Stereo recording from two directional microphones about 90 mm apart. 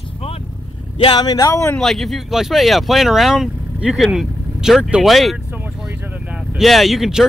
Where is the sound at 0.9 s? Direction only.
65° left (ahead or behind).